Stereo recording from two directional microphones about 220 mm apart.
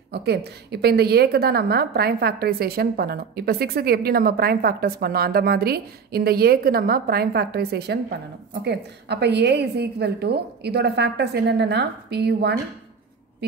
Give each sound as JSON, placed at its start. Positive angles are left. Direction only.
{"t": 0.1, "sound": "a woman's voice", "side_deg": -45}